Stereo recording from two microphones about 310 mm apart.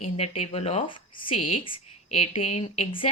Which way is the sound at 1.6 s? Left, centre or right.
Centre.